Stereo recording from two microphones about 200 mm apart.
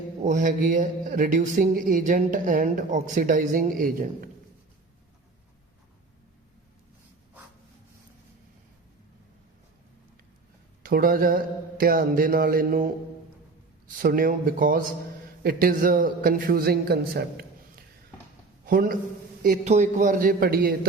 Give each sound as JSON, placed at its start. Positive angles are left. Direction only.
{"t": 0.2, "sound": "speech", "side_deg": -40}
{"t": 10.8, "sound": "speech", "side_deg": -45}
{"t": 14.0, "sound": "a man's voice", "side_deg": -45}